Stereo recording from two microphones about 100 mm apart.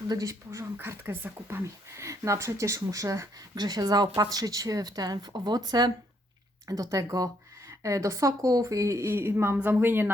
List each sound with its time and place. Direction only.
0.1 s speech: 35° right (ahead or behind)